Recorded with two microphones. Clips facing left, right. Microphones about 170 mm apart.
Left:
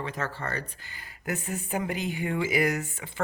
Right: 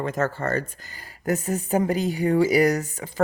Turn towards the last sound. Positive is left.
turn(degrees=-40)  # may be behind; listen again after turning